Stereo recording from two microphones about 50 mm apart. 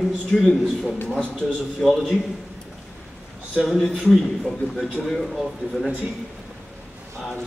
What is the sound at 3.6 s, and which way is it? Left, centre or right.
Speech, centre.